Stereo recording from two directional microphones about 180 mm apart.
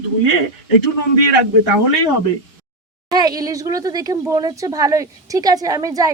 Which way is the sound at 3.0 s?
20° right (ahead or behind).